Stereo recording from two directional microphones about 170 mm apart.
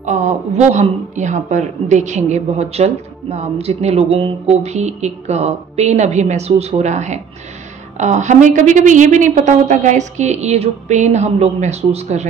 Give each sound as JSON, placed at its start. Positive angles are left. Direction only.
{"t": 0.0, "sound": "a woman's voice", "side_deg": -45}